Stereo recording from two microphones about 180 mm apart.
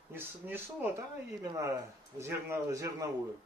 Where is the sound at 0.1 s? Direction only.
10° right (ahead or behind).